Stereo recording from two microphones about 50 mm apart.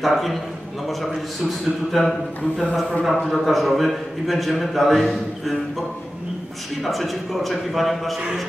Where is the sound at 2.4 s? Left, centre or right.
Left.